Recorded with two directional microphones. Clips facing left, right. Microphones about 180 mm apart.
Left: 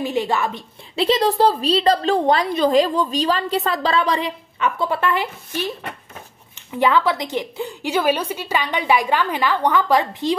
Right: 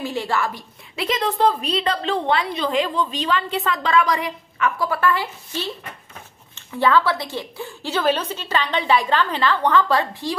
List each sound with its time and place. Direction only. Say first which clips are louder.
0.0 s a woman's voice: left 3 dB; 20° left (ahead or behind)